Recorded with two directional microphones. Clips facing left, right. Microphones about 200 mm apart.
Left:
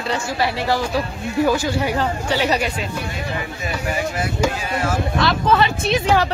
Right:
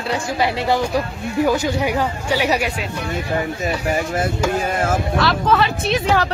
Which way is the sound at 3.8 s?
45° right (ahead or behind).